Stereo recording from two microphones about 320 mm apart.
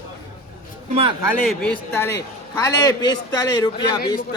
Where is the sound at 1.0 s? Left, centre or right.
Centre.